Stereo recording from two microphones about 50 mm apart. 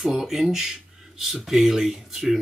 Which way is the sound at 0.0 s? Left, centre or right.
Centre.